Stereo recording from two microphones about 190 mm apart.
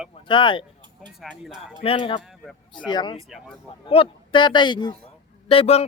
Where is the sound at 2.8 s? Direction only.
25° left (ahead or behind).